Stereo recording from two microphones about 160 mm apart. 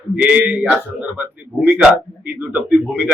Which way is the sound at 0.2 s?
10° right (ahead or behind).